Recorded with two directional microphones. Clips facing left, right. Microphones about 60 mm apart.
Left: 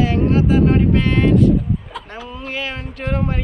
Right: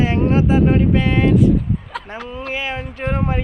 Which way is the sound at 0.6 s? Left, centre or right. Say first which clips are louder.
Even; centre.